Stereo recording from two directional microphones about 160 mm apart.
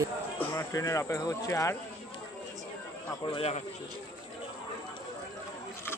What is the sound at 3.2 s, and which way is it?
Speech, 35° left (ahead or behind).